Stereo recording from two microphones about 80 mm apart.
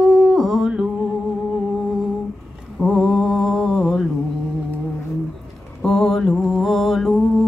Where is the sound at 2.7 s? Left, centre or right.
Centre.